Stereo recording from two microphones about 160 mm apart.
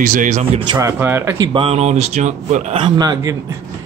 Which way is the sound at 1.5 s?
40° right (ahead or behind).